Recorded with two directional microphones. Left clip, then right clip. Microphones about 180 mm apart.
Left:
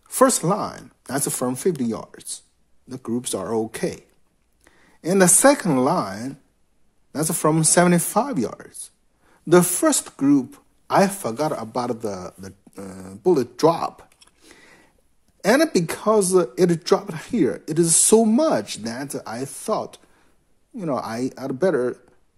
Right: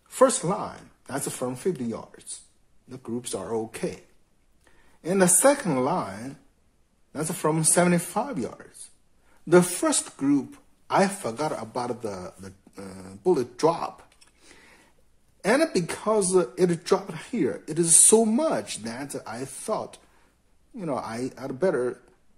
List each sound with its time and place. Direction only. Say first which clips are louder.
0.1 s a man's voice: left 3 dB; 40° left (ahead or behind)
5.0 s a man's voice: left 5 dB; 40° left (ahead or behind)